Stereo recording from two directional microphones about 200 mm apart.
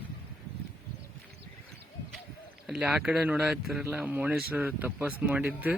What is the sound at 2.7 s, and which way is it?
Speech, 5° right (ahead or behind).